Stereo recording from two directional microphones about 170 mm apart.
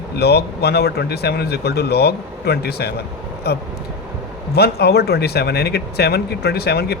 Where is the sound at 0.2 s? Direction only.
70° left (ahead or behind).